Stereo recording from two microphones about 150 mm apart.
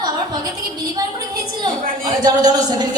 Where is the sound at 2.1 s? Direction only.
30° right (ahead or behind).